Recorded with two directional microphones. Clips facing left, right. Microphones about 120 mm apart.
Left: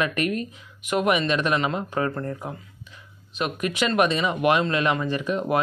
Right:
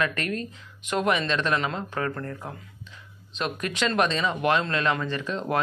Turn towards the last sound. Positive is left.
turn(degrees=10)  # may be behind; listen again after turning